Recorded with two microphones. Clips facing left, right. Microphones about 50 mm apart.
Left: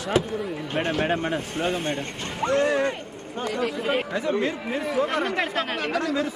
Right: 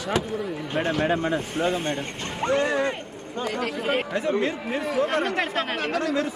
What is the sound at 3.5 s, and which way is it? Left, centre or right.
Speech, right.